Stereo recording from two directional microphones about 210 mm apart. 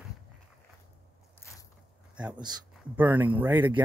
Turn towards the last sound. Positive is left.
turn(degrees=-10)  # may be behind; listen again after turning